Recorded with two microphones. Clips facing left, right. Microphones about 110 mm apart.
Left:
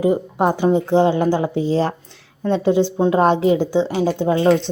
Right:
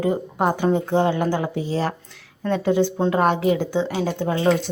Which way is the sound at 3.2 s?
25° left (ahead or behind).